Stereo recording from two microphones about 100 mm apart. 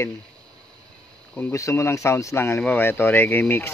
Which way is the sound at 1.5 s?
25° left (ahead or behind).